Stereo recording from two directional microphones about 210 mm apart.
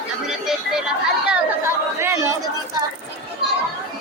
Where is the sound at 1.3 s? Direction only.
10° right (ahead or behind).